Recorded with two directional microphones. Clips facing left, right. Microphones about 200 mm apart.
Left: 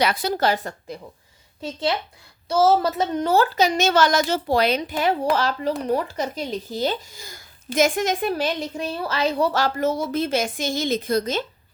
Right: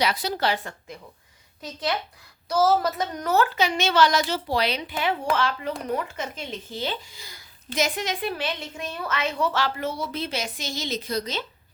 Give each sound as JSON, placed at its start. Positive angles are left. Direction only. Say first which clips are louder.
{"t": 0.0, "sound": "speech", "louder": "left 4 dB", "side_deg": 50}
{"t": 1.6, "sound": "a woman's voice", "louder": "left 4 dB", "side_deg": 30}